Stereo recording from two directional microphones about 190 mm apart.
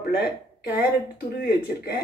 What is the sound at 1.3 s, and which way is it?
Speech, 55° left (ahead or behind).